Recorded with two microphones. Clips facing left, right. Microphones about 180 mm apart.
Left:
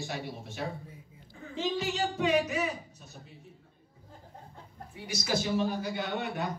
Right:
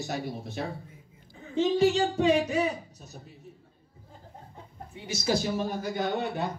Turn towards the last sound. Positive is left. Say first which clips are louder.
# right 4 dB
turn(degrees=-40)  # may be behind; listen again after turning